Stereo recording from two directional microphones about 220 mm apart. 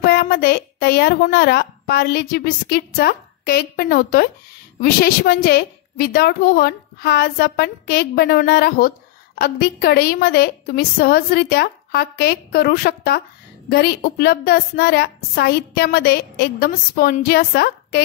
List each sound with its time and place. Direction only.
0.0 s a woman's voice: 45° left (ahead or behind)